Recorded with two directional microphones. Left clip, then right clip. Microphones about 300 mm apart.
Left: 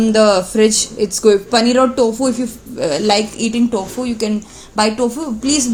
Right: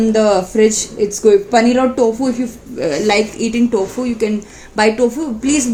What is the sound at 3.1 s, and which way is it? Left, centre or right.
Speech, left.